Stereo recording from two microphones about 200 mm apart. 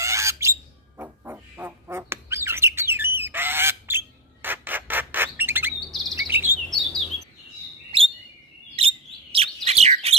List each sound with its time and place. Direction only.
0.0 s fowl: 15° right (ahead or behind)
3.2 s squawk: 10° right (ahead or behind)
5.9 s chirp: centre (ahead or behind)
6.1 s chirp: 10° right (ahead or behind)
6.7 s chirp: centre (ahead or behind)
7.9 s chirp: 25° right (ahead or behind)
8.7 s bird: 30° right (ahead or behind)